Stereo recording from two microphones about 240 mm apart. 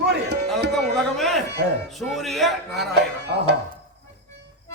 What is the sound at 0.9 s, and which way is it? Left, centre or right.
A man's voice, centre.